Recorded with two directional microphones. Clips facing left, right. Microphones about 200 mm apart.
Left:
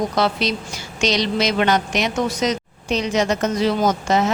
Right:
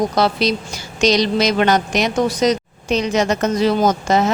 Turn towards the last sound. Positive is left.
turn(degrees=-40)  # may be behind; listen again after turning